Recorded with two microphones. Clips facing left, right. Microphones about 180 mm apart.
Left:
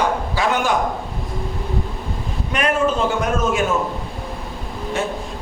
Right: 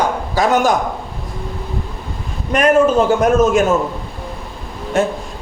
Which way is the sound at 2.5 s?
45° right (ahead or behind).